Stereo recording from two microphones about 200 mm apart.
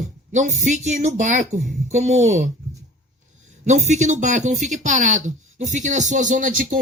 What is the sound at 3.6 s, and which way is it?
Speech, 35° right (ahead or behind).